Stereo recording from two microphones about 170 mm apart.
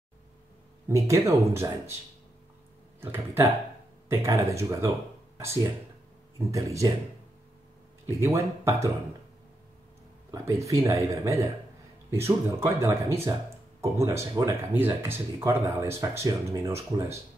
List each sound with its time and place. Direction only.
0.8 s speech: 15° right (ahead or behind)
3.0 s speech: 15° right (ahead or behind)
8.2 s speech: 15° right (ahead or behind)
10.3 s speech: 20° right (ahead or behind)